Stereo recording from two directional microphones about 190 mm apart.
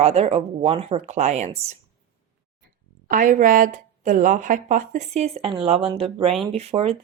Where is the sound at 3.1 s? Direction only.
45° right (ahead or behind).